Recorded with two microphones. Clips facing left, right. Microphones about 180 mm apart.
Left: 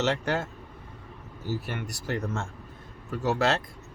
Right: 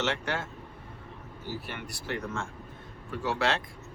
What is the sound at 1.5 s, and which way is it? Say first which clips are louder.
Speech: left 5 dB; 45° left (ahead or behind).